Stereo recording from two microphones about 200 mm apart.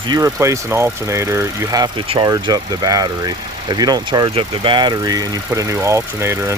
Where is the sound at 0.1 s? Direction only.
15° right (ahead or behind).